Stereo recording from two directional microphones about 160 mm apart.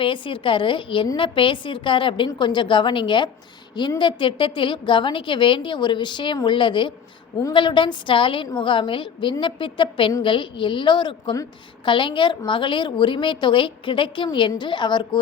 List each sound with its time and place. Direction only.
0.0 s a woman's voice: 30° left (ahead or behind)